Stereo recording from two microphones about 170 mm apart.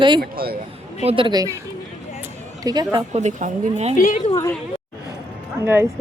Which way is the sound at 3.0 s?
40° right (ahead or behind).